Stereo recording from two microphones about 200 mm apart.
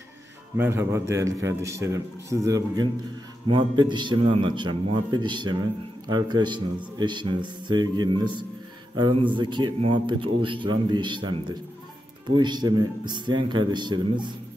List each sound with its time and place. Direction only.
0.6 s a man's voice: 10° right (ahead or behind)